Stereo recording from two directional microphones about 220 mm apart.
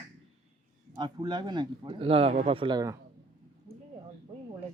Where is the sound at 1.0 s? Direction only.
20° right (ahead or behind).